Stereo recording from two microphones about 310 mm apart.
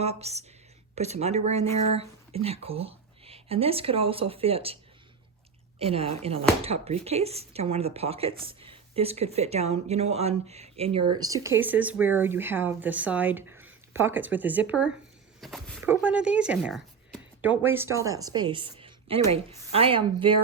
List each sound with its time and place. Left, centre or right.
0.0 s speech: centre
5.8 s a woman's voice: centre